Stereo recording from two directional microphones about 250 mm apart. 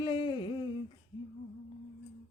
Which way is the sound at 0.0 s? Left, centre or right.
Centre.